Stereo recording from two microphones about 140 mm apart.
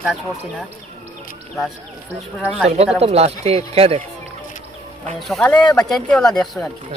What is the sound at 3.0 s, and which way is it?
Speech, 50° right (ahead or behind).